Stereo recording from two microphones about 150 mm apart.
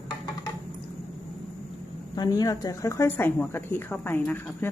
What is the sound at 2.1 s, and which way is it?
Speech, 25° left (ahead or behind).